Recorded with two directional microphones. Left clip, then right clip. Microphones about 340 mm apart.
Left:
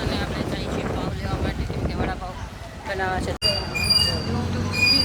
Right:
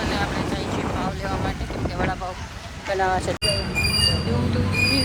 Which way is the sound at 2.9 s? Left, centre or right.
Centre.